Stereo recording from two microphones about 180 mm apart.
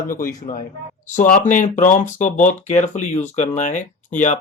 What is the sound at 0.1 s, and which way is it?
Speech, 50° left (ahead or behind).